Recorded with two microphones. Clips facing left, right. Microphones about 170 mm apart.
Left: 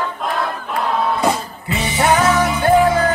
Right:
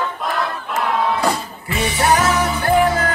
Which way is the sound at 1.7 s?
20° left (ahead or behind).